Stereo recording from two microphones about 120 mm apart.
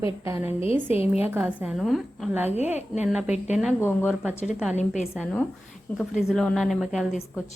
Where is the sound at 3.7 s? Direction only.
20° left (ahead or behind).